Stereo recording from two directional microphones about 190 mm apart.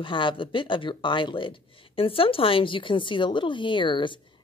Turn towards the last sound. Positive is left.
turn(degrees=25)  # may be behind; listen again after turning